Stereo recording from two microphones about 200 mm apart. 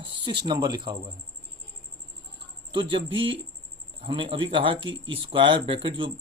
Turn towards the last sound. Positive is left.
turn(degrees=-25)  # may be behind; listen again after turning